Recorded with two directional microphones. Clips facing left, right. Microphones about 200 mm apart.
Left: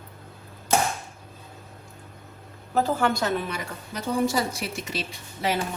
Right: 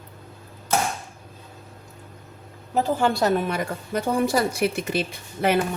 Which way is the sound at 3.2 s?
50° right (ahead or behind).